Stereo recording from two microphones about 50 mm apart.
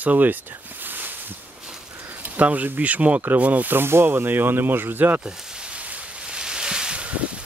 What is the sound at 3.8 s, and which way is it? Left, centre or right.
Speech, right.